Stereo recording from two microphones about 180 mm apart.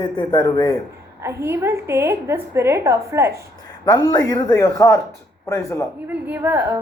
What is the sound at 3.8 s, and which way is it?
Speech, 20° left (ahead or behind).